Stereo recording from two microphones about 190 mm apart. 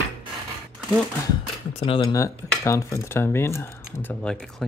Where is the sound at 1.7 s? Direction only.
30° left (ahead or behind).